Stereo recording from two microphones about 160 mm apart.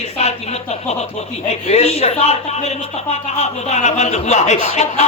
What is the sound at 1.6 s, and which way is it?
Speech, 40° left (ahead or behind).